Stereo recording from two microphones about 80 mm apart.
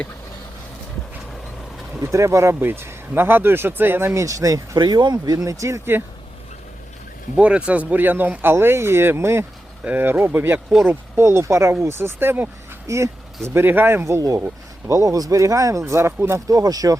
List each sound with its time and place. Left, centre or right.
2.0 s speech: right
4.1 s speech: right
7.3 s speech: centre; by 9.5 s right
9.8 s speech: right
10.8 s speech: right
12.9 s speech: right
13.5 s speech: right
16.5 s speech: right